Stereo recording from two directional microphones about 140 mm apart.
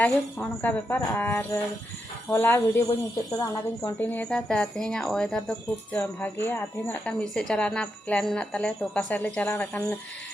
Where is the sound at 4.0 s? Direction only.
10° left (ahead or behind).